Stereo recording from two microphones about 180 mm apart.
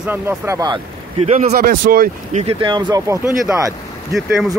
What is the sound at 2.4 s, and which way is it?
Speech, 25° right (ahead or behind).